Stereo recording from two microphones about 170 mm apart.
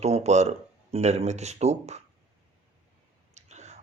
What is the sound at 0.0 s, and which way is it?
Speech, 40° right (ahead or behind).